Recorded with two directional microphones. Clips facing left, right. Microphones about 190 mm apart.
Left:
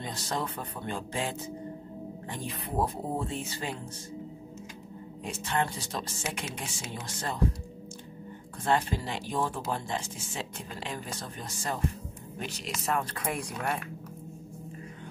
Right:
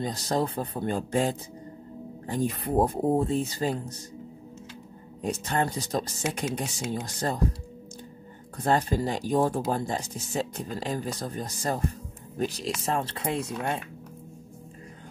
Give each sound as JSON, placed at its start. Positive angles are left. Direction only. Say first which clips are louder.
{"t": 0.0, "sound": "speech", "louder": "right 7 dB", "side_deg": -35}
{"t": 5.2, "sound": "speech", "louder": "right 4 dB", "side_deg": -40}
{"t": 8.5, "sound": "speech", "louder": "right 4 dB", "side_deg": -40}